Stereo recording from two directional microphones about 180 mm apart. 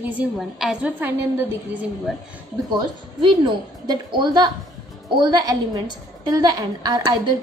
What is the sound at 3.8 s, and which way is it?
A woman's voice, 25° right (ahead or behind).